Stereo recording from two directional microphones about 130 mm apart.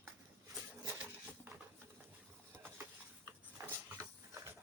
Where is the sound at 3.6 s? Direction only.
20° right (ahead or behind).